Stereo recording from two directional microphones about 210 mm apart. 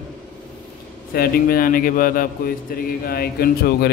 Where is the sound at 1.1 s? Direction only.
45° left (ahead or behind).